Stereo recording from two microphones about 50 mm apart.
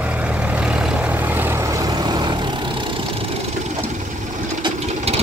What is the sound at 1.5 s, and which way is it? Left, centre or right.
Vehicle, right.